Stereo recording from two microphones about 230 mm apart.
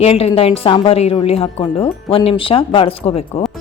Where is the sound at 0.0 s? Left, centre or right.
Left.